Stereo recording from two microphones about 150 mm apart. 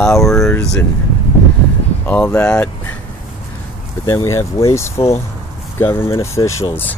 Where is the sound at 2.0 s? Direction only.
10° left (ahead or behind).